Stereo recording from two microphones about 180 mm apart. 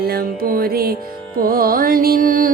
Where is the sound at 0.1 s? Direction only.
55° right (ahead or behind).